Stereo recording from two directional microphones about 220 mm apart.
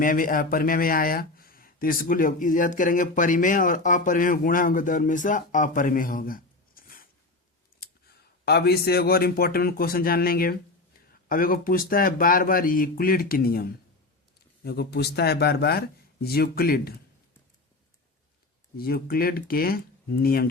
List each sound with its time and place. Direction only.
0.0 s speech: 40° left (ahead or behind)
18.8 s speech: 40° left (ahead or behind)